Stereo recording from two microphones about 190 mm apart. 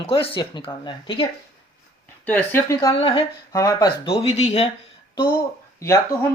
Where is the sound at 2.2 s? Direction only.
10° left (ahead or behind); by 4.7 s 35° left (ahead or behind).